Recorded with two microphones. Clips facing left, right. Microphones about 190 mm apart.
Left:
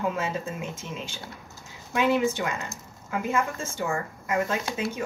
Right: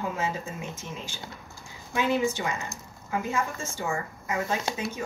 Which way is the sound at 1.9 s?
55° left (ahead or behind).